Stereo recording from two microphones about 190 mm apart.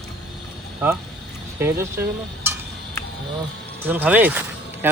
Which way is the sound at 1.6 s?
15° right (ahead or behind).